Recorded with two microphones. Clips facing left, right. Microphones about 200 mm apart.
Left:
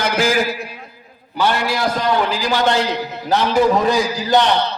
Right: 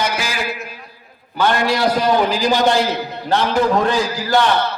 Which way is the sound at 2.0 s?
15° right (ahead or behind).